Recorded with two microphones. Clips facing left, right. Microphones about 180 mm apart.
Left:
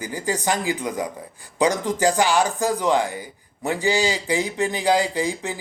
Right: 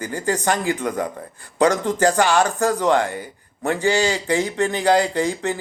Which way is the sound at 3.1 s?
10° left (ahead or behind).